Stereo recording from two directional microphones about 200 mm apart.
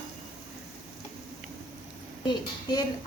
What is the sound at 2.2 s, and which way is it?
Speech, 20° left (ahead or behind).